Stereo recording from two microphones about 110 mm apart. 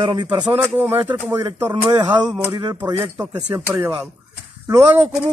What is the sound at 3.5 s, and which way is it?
Speech, 20° right (ahead or behind).